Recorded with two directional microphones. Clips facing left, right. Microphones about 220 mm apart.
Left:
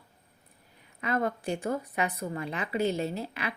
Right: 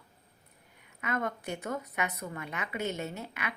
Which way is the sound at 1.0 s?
30° left (ahead or behind).